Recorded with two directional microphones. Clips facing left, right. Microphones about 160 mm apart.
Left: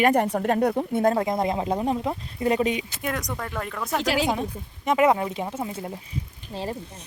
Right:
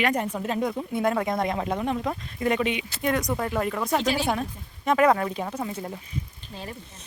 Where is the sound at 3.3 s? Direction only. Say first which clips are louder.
Right 5 dB; 10° right (ahead or behind).